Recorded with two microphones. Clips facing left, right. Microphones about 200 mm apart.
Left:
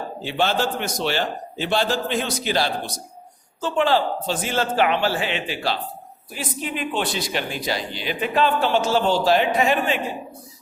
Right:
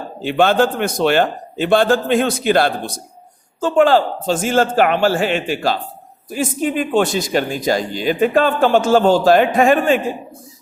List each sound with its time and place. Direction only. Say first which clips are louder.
0.2 s speech: right 8 dB; 55° right (ahead or behind)